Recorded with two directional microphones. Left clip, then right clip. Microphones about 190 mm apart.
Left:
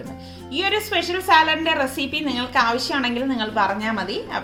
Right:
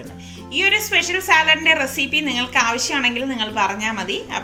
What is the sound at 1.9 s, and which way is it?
Speech, centre (ahead or behind).